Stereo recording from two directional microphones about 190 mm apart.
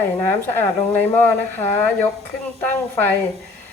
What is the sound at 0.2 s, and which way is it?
Speech, 10° left (ahead or behind).